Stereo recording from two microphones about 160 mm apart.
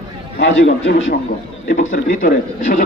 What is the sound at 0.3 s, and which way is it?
Speech, 90° left.